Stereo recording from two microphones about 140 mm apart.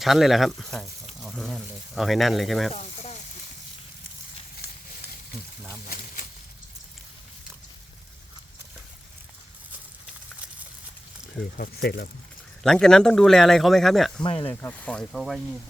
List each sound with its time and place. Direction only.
0.0 s speech: centre (ahead or behind)
2.7 s sizzle: 50° left (ahead or behind)
11.5 s speech: 90° left
12.6 s speech: 5° left (ahead or behind)
14.2 s speech: 40° left (ahead or behind)
14.5 s speech: 15° left (ahead or behind)